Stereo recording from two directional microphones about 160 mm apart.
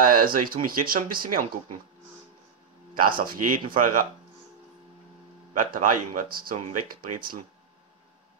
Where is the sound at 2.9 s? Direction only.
65° right (ahead or behind).